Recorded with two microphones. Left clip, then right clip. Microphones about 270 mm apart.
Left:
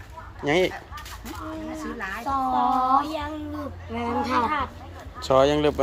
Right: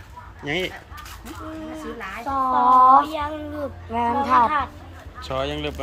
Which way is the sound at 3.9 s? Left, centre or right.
Centre.